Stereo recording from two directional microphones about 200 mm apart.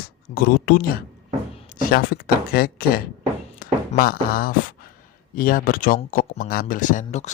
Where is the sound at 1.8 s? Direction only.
45° left (ahead or behind).